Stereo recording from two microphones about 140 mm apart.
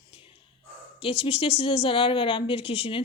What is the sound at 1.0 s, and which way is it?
Speech, 40° left (ahead or behind).